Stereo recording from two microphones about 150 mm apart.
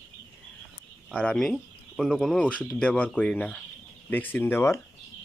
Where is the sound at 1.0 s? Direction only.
5° left (ahead or behind).